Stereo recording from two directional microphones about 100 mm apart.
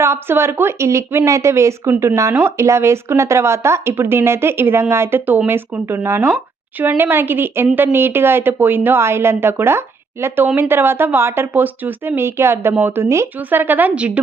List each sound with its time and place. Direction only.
0.0 s speech: 25° right (ahead or behind)